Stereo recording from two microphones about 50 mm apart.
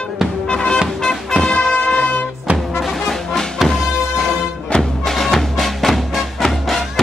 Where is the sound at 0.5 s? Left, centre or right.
Centre.